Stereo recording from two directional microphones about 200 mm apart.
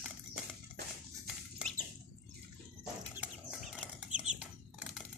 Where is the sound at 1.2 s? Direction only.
Centre (ahead or behind).